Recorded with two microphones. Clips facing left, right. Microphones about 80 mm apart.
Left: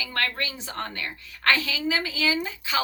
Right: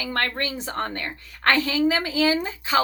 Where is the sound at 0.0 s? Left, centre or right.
Right.